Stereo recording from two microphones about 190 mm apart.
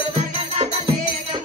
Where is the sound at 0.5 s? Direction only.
35° right (ahead or behind).